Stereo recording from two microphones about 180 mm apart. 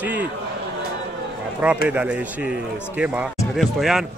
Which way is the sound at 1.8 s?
10° right (ahead or behind).